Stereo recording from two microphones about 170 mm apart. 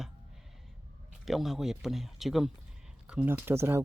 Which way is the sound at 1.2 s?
Centre (ahead or behind).